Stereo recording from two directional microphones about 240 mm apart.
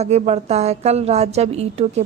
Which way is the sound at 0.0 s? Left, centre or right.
Right.